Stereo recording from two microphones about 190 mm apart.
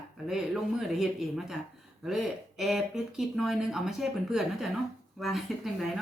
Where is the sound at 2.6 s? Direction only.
Centre (ahead or behind).